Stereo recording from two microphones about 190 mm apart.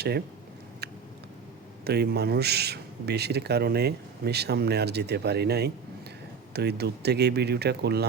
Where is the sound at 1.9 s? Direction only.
60° right (ahead or behind).